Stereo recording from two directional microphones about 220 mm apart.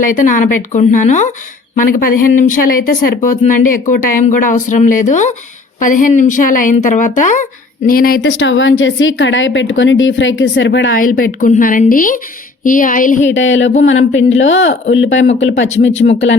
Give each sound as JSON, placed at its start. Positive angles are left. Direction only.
{"t": 0.0, "sound": "speech", "side_deg": 35}
{"t": 8.2, "sound": "a woman's voice", "side_deg": 60}
{"t": 13.2, "sound": "a woman's voice", "side_deg": 60}